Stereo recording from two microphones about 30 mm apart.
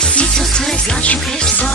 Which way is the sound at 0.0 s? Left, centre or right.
Left.